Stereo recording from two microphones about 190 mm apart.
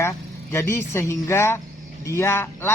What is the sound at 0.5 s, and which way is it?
A man's voice, 15° left (ahead or behind).